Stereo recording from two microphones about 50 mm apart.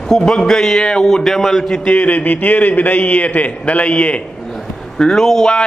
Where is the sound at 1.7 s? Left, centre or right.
Left.